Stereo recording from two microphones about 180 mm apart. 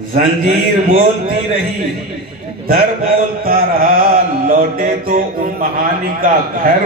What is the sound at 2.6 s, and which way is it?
Carnatic music, 55° right (ahead or behind).